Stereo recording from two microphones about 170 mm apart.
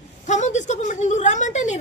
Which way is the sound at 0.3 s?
45° left (ahead or behind).